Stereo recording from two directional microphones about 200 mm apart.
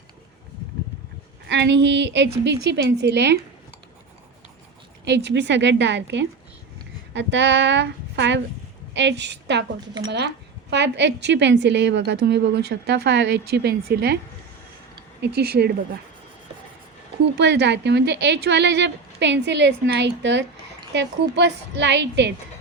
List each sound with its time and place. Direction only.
1.5 s speech: 60° right (ahead or behind)
5.0 s a woman's voice: 60° right (ahead or behind)
15.2 s speech: 55° right (ahead or behind)
17.3 s speech: 60° right (ahead or behind)